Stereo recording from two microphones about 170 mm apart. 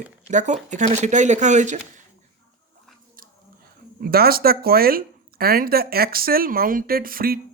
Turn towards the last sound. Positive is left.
turn(degrees=-60)  # may be behind; listen again after turning